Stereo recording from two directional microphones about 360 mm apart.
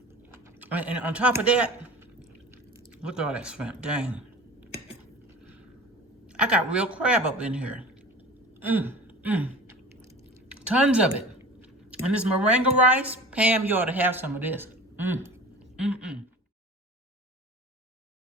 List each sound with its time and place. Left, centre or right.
0.1 s typing: centre
2.7 s speech: centre
6.2 s speech: centre
8.5 s chewing: centre
11.9 s speech: centre
15.7 s a sound: centre